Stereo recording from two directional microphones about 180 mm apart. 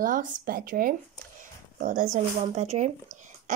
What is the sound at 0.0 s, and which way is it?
Speech, 45° right (ahead or behind).